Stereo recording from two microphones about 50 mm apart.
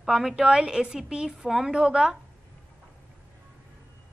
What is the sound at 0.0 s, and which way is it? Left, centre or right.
A woman's voice, centre.